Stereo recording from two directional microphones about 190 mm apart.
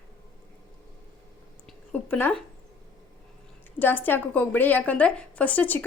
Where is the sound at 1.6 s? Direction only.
5° left (ahead or behind).